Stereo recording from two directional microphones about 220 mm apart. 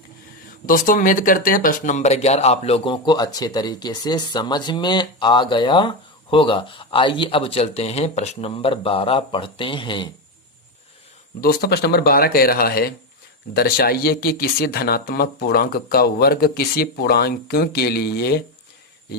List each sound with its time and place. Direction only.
0.6 s speech: 40° left (ahead or behind); by 10.1 s 20° left (ahead or behind)
11.3 s speech: 40° left (ahead or behind)